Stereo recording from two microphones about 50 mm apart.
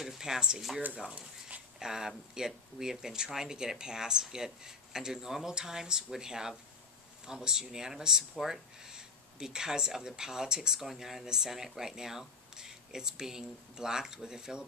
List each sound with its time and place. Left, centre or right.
0.0 s a sound: centre
0.9 s speech: right
1.8 s speech: centre